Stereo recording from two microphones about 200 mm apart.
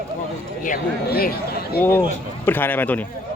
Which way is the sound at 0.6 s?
45° left (ahead or behind).